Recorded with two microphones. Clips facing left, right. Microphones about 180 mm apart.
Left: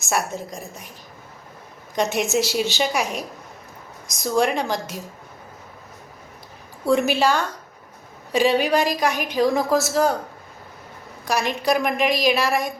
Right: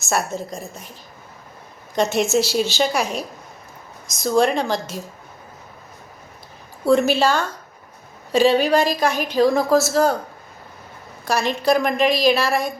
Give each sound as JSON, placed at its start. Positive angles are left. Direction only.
{"t": 0.2, "sound": "a woman's voice", "side_deg": -30}
{"t": 0.6, "sound": "a woman's voice", "side_deg": 15}
{"t": 2.0, "sound": "a woman's voice", "side_deg": 15}
{"t": 3.0, "sound": "a woman's voice", "side_deg": -35}
{"t": 4.0, "sound": "a woman's voice", "side_deg": 15}
{"t": 6.8, "sound": "a woman's voice", "side_deg": 15}
{"t": 11.6, "sound": "a woman's voice", "side_deg": 15}